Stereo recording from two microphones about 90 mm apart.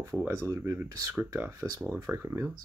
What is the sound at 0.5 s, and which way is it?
Speech, 30° right (ahead or behind).